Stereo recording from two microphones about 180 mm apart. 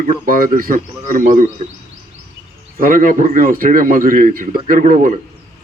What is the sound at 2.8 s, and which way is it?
Speech, 50° right (ahead or behind).